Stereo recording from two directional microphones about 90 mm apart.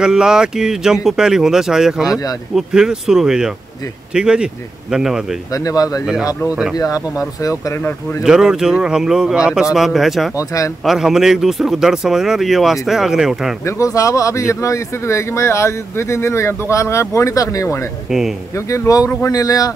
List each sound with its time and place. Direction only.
0.0 s a man's voice: 5° right (ahead or behind)
5.5 s speech: 40° left (ahead or behind)
6.5 s a man's voice: 10° right (ahead or behind)
6.8 s speech: 40° left (ahead or behind)
8.2 s a man's voice: 5° right (ahead or behind)
10.3 s speech: 40° left (ahead or behind)
10.9 s speech: 5° right (ahead or behind)
13.7 s speech: 35° left (ahead or behind)